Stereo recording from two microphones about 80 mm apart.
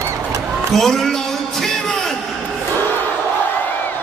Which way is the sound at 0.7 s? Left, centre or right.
Centre.